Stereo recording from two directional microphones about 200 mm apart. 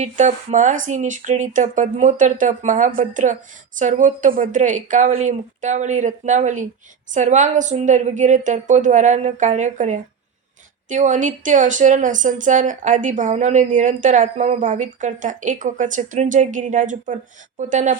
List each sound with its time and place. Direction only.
0.0 s a woman's voice: 35° right (ahead or behind)